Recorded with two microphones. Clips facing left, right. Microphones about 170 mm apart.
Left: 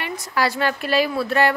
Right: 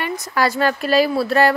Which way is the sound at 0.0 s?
45° right (ahead or behind).